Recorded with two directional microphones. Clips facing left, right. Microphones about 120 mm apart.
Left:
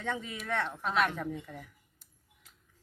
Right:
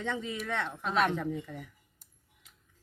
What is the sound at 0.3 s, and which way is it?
Speech, centre (ahead or behind).